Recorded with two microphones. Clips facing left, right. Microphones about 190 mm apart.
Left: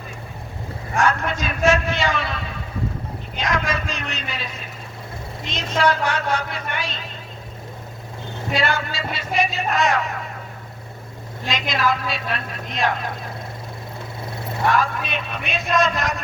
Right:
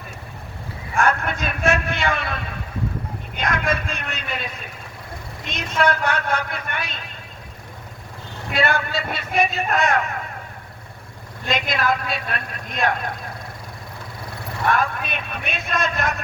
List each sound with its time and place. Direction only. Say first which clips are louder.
0.9 s a sound: even; 55° right (ahead or behind)
3.3 s a man's voice: even; 55° right (ahead or behind)
5.5 s a man's voice: left 1 dB; 55° right (ahead or behind)
8.5 s a man's voice: right 2 dB; 55° right (ahead or behind)
11.4 s a woman's voice: even; 55° right (ahead or behind)
14.7 s a man's voice: even; 55° right (ahead or behind)